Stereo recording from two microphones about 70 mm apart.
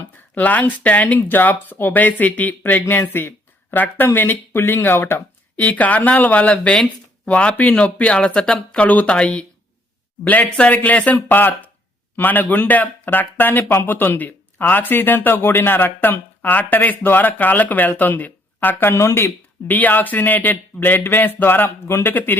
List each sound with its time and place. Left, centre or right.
0.3 s speech: left
10.6 s speech: left
19.6 s speech: left